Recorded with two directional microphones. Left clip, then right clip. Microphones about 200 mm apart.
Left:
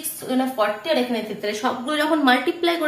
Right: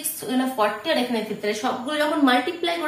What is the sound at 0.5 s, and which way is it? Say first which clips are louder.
A woman's voice: even; 35° left (ahead or behind).